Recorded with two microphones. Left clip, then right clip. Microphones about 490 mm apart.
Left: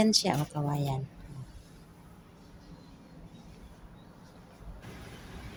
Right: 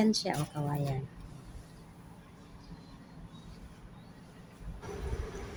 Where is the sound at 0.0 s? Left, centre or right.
Left.